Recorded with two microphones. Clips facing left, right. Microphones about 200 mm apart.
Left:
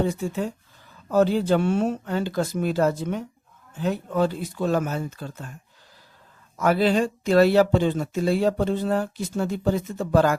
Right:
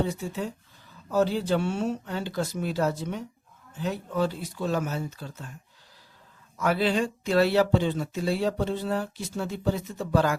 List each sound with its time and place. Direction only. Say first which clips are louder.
0.0 s speech: left 4 dB; 50° left (ahead or behind)
6.6 s speech: left 4 dB; 45° left (ahead or behind)